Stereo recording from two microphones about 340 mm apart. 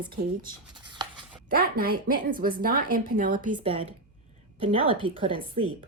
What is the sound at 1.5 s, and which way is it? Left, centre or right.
A woman's voice, right.